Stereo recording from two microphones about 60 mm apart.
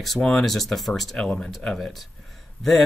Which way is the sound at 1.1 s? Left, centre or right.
Centre.